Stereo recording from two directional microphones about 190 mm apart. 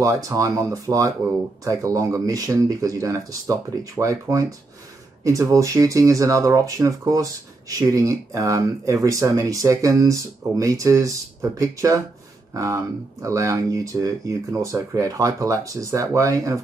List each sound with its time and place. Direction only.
0.0 s speech: 15° right (ahead or behind)